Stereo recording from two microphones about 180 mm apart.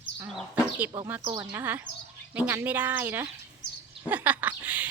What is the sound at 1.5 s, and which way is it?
Speech, 10° right (ahead or behind).